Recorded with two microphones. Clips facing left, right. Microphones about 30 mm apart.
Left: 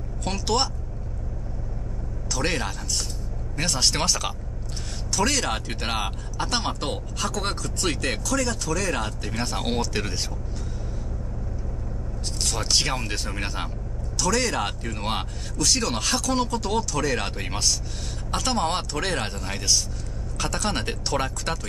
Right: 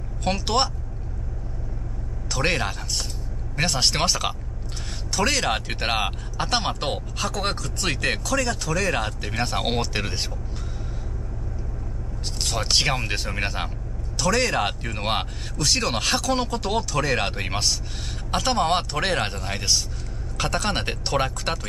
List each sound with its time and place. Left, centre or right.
0.2 s speech: right
2.2 s speech: right
12.4 s speech: centre